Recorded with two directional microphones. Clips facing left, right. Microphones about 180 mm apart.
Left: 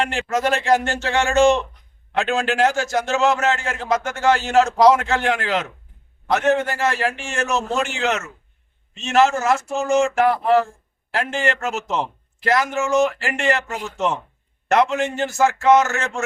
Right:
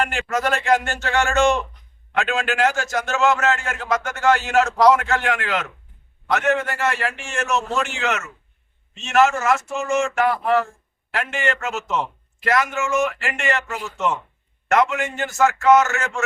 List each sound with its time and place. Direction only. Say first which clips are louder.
0.0 s a man's voice: left 1 dB; 25° left (ahead or behind)
14.7 s a man's voice: left 1 dB; 30° left (ahead or behind)